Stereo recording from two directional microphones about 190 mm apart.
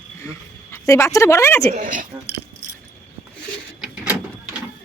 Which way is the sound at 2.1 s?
10° right (ahead or behind).